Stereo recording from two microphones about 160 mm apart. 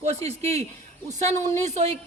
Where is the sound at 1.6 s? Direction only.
45° right (ahead or behind).